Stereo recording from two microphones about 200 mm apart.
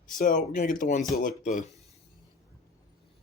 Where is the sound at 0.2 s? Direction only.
40° left (ahead or behind).